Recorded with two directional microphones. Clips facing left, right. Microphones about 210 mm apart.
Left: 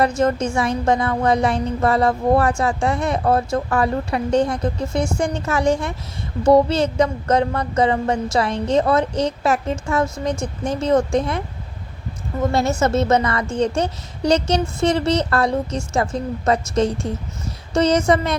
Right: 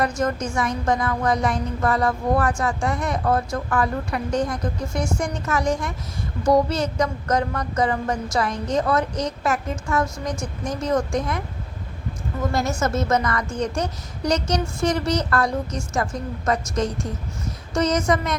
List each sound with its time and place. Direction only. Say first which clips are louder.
0.2 s a woman's voice: left 5 dB; 25° left (ahead or behind)
12.5 s a woman's voice: left 5 dB; 25° left (ahead or behind)